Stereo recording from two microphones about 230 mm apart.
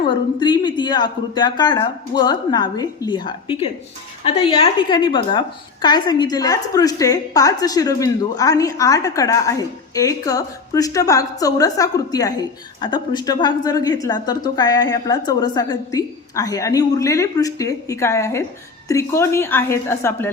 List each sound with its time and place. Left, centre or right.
0.1 s a woman's voice: centre